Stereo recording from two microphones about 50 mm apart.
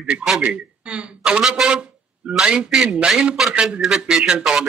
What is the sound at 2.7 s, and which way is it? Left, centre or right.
A man's voice, centre.